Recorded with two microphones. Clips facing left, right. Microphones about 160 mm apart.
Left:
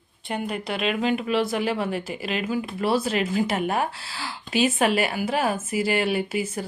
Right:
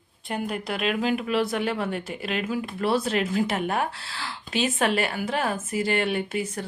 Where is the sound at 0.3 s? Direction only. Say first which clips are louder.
Left 1 dB; centre (ahead or behind).